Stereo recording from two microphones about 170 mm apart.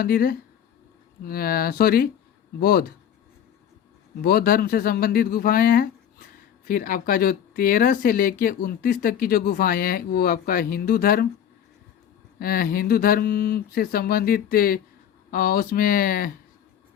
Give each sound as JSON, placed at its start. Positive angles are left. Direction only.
{"t": 0.0, "sound": "speech", "side_deg": 60}
{"t": 4.2, "sound": "speech", "side_deg": 60}
{"t": 12.4, "sound": "speech", "side_deg": 60}